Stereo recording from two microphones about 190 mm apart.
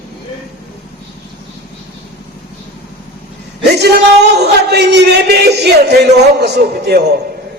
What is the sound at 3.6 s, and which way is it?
A woman's voice, 60° right (ahead or behind).